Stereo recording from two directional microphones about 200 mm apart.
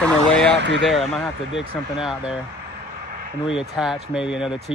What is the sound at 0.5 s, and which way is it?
Speech, 60° right (ahead or behind).